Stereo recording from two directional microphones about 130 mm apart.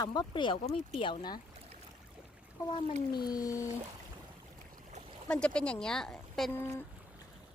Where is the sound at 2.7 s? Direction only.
30° left (ahead or behind).